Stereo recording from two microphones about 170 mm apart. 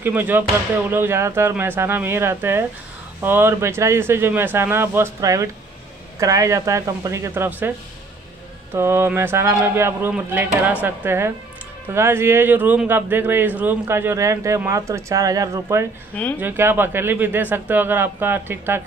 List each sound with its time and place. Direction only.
0.0 s speech: 10° right (ahead or behind)
8.7 s speech: 15° right (ahead or behind)